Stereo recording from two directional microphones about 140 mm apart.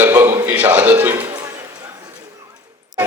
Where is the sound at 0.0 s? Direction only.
20° right (ahead or behind).